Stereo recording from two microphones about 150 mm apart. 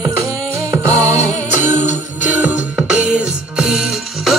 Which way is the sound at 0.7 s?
15° right (ahead or behind).